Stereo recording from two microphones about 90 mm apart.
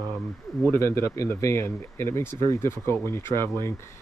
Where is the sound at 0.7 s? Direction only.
25° left (ahead or behind).